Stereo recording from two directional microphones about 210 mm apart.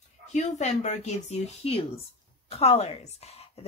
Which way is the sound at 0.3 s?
35° left (ahead or behind).